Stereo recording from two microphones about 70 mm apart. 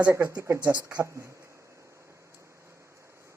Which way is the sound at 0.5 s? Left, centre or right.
Right.